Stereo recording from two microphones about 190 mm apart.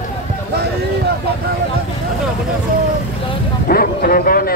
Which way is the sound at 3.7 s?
50° left (ahead or behind).